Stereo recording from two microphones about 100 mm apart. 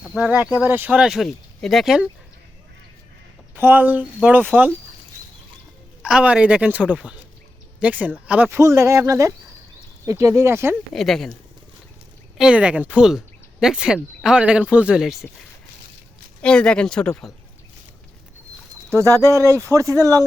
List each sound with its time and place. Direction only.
0.3 s speech: 15° right (ahead or behind)
0.9 s speech: 5° right (ahead or behind)
3.5 s speech: 20° right (ahead or behind)
6.0 s speech: 5° right (ahead or behind)
8.4 s speech: 30° right (ahead or behind)
10.9 s speech: centre (ahead or behind)
12.4 s speech: 10° right (ahead or behind)
16.4 s speech: 10° left (ahead or behind)
18.9 s speech: 35° right (ahead or behind)